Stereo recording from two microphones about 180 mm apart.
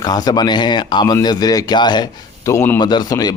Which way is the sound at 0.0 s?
20° left (ahead or behind).